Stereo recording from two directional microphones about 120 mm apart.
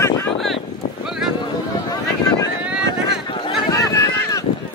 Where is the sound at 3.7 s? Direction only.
25° left (ahead or behind).